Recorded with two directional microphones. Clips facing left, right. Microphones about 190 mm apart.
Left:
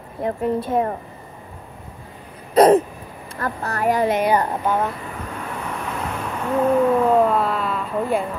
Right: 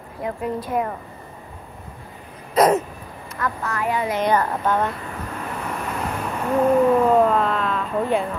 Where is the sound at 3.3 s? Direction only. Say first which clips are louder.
Left 1 dB; 35° left (ahead or behind).